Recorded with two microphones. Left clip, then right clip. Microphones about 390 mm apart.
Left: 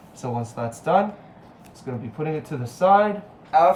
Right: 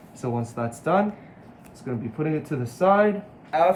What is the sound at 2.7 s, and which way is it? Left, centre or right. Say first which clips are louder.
Speech: left 3 dB; centre.